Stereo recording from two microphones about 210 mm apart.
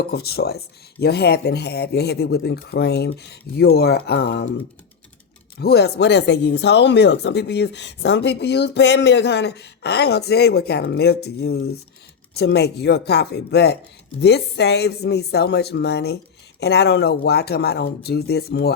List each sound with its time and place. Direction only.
0.1 s speech: 50° left (ahead or behind)
5.5 s speech: 50° left (ahead or behind)